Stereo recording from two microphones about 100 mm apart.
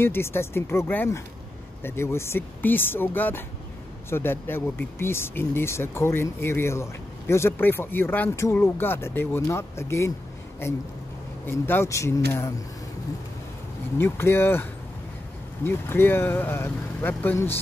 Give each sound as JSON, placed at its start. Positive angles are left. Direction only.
{"t": 0.0, "sound": "speech", "side_deg": 25}
{"t": 11.4, "sound": "speech", "side_deg": 20}
{"t": 13.9, "sound": "speech", "side_deg": 25}